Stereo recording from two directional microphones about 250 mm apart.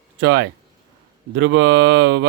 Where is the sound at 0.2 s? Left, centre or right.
Right.